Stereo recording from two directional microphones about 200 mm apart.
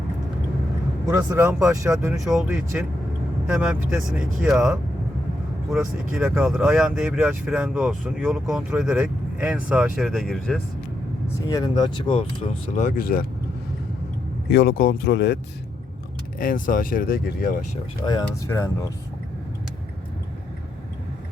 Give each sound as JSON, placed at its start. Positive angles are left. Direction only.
{"t": 1.0, "sound": "speech", "side_deg": -20}
{"t": 2.2, "sound": "speech", "side_deg": 0}
{"t": 11.4, "sound": "speech", "side_deg": 20}
{"t": 12.8, "sound": "speech", "side_deg": 45}
{"t": 14.5, "sound": "speech", "side_deg": 50}
{"t": 16.4, "sound": "speech", "side_deg": 45}
{"t": 18.0, "sound": "speech", "side_deg": 20}